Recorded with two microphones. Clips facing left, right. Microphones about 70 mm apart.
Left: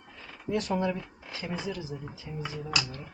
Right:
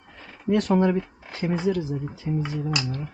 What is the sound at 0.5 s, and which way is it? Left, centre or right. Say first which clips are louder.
Speech: right 8 dB; right.